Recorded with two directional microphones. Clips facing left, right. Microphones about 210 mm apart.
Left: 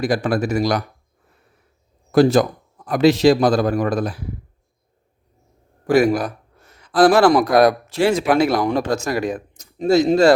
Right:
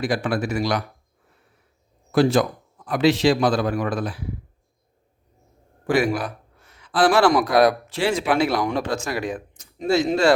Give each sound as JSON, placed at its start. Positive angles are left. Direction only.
{"t": 0.0, "sound": "a man's voice", "side_deg": 40}
{"t": 2.1, "sound": "a man's voice", "side_deg": 40}
{"t": 6.0, "sound": "a man's voice", "side_deg": 40}